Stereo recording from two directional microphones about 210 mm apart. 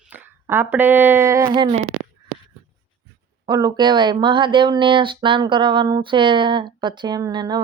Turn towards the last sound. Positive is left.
turn(degrees=-20)  # may be behind; listen again after turning